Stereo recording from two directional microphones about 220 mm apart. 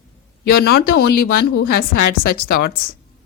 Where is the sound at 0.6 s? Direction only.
45° left (ahead or behind).